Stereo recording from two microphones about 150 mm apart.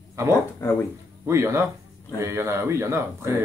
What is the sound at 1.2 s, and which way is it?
A man's voice, 15° right (ahead or behind).